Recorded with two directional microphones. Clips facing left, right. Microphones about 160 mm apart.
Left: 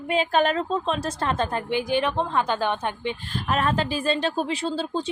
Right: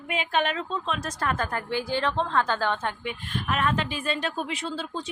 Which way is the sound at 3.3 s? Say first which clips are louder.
Left 2 dB; 35° left (ahead or behind).